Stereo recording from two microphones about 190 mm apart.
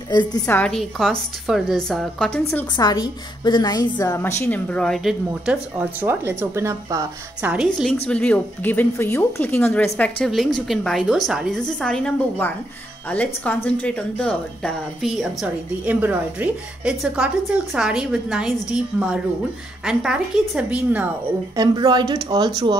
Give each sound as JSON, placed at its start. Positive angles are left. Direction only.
{"t": 0.1, "sound": "a woman's voice", "side_deg": 20}
{"t": 0.6, "sound": "a woman's voice", "side_deg": 5}
{"t": 2.7, "sound": "a woman's voice", "side_deg": 20}
{"t": 7.5, "sound": "a woman's voice", "side_deg": -5}
{"t": 21.5, "sound": "speech", "side_deg": -20}